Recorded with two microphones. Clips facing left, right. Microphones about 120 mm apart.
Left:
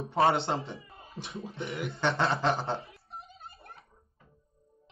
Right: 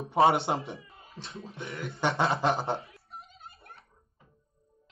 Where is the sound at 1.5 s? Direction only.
25° left (ahead or behind).